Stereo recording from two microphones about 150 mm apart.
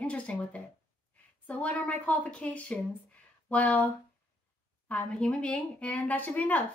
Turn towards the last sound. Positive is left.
turn(degrees=10)  # may be behind; listen again after turning